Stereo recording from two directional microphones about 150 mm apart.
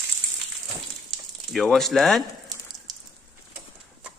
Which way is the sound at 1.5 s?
Centre (ahead or behind).